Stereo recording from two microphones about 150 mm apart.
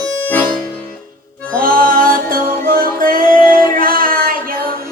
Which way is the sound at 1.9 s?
70° right (ahead or behind).